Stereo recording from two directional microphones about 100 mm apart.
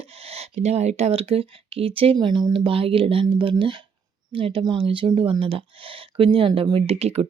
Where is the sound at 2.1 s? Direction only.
50° right (ahead or behind).